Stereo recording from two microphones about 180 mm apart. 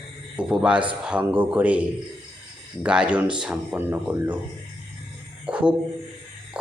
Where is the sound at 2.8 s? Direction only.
5° right (ahead or behind).